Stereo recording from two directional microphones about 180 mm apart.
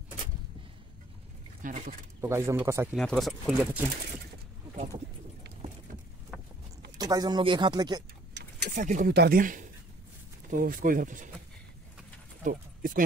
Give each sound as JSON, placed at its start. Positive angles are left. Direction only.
{"t": 1.6, "sound": "speech", "side_deg": -45}
{"t": 2.2, "sound": "speech", "side_deg": -15}
{"t": 2.9, "sound": "speech", "side_deg": 0}
{"t": 7.0, "sound": "speech", "side_deg": -20}
{"t": 8.7, "sound": "speech", "side_deg": -45}
{"t": 9.1, "sound": "speech", "side_deg": -60}
{"t": 12.4, "sound": "speech", "side_deg": -50}